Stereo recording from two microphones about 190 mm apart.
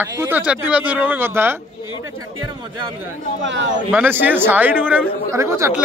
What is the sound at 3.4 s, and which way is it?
Speech, 75° right (ahead or behind).